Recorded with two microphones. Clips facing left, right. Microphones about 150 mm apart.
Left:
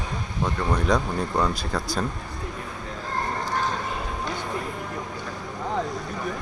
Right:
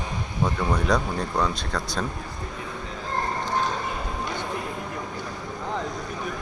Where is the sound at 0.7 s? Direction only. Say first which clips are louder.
Left 1 dB; centre (ahead or behind).